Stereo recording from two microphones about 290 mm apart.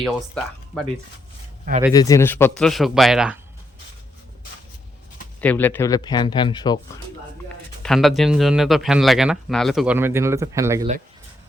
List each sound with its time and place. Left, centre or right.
0.0 s speech: centre
1.9 s speech: centre
5.4 s speech: centre
7.8 s speech: centre